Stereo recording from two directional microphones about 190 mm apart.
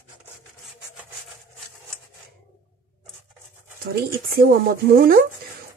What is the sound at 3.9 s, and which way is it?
Speech, 55° right (ahead or behind).